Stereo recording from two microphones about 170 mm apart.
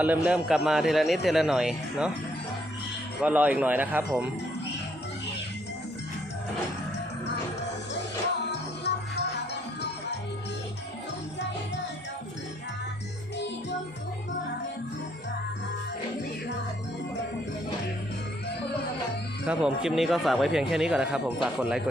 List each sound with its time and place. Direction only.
0.0 s a man's voice: 10° right (ahead or behind)
3.2 s speech: 10° right (ahead or behind)
8.8 s music: 80° left
19.5 s a man's voice: 5° right (ahead or behind)